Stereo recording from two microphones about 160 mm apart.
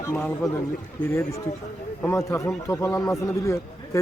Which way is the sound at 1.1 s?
15° left (ahead or behind).